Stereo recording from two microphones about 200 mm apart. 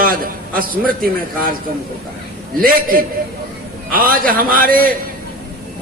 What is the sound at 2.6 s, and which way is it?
A man's voice, 45° right (ahead or behind).